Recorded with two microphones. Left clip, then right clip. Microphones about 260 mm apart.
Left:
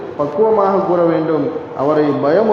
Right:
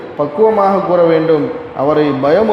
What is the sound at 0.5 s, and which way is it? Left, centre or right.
A man's voice, right.